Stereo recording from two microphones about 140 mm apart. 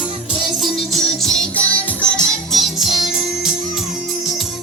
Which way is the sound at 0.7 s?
Centre (ahead or behind).